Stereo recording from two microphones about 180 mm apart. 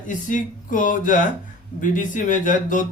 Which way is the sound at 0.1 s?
45° left (ahead or behind).